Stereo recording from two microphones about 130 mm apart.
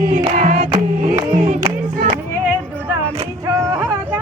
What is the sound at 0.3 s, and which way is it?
Choir, 80° right.